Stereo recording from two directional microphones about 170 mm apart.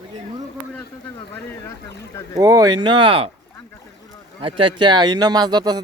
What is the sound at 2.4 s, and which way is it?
Speech, 20° right (ahead or behind).